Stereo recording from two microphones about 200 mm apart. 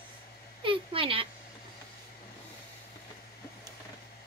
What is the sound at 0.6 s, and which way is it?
Speech, 25° right (ahead or behind).